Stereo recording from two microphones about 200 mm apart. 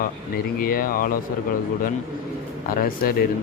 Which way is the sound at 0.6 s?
45° left (ahead or behind).